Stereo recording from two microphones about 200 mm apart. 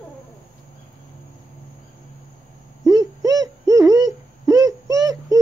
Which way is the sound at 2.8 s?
20° right (ahead or behind).